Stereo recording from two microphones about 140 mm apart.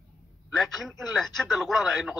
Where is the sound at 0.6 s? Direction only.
Centre (ahead or behind).